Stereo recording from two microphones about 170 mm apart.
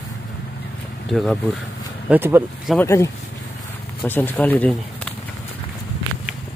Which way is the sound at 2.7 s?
15° left (ahead or behind).